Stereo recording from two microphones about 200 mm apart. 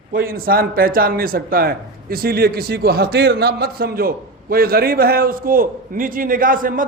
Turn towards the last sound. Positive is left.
turn(degrees=-45)  # may be behind; listen again after turning